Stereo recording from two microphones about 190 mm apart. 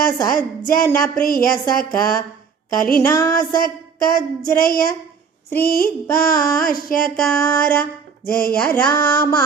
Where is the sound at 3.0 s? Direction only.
15° left (ahead or behind).